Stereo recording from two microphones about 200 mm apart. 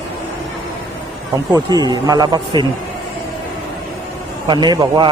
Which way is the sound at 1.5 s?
20° right (ahead or behind).